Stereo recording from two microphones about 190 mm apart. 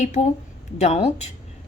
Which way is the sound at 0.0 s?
40° left (ahead or behind).